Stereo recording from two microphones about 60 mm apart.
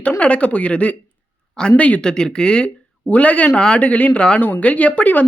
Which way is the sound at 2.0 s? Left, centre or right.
Centre.